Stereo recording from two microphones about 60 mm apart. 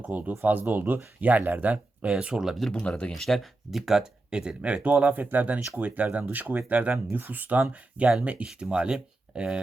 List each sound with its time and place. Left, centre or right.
0.0 s speech: right; by 2.6 s centre
2.6 s speech: centre
2.8 s speech: centre
3.2 s speech: centre